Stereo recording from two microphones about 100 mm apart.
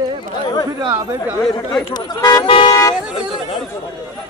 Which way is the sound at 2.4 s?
65° left (ahead or behind).